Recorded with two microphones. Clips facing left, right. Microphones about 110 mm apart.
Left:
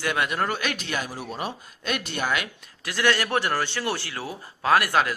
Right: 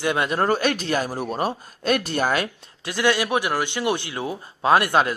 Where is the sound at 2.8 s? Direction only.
15° right (ahead or behind).